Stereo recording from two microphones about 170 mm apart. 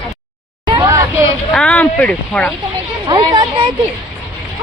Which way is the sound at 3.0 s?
25° right (ahead or behind).